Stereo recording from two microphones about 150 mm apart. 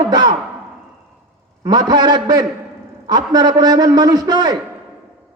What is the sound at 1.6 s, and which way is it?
A man's voice, 25° right (ahead or behind).